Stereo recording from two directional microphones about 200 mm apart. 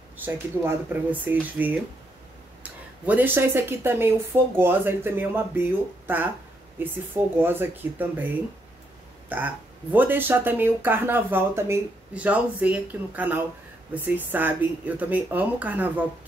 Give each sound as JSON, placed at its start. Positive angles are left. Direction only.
{"t": 0.2, "sound": "speech", "side_deg": -10}
{"t": 9.3, "sound": "speech", "side_deg": -10}